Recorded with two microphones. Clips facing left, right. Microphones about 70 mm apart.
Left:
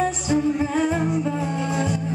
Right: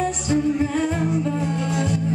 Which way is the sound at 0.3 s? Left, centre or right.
Centre.